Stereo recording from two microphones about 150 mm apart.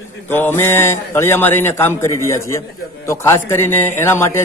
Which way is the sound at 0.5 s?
15° left (ahead or behind).